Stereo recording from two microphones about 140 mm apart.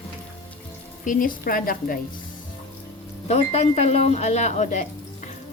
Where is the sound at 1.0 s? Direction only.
80° left.